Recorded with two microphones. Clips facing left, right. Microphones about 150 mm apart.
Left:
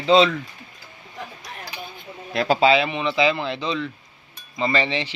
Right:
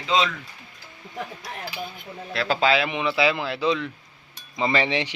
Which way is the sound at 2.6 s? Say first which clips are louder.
Left 2 dB; centre (ahead or behind).